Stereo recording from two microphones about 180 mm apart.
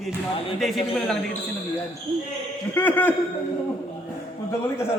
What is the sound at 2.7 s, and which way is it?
Speech, 10° left (ahead or behind).